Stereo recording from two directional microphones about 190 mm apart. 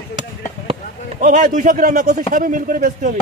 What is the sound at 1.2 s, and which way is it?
A man's voice, 45° right (ahead or behind).